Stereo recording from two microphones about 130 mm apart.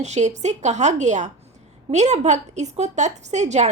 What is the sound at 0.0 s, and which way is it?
Speech, 60° right (ahead or behind).